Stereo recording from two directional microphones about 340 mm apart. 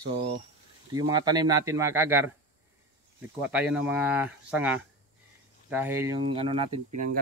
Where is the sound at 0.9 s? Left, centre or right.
Centre.